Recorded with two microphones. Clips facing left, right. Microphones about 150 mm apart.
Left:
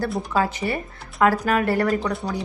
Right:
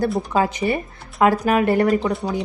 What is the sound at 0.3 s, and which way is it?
A woman's voice, 20° right (ahead or behind).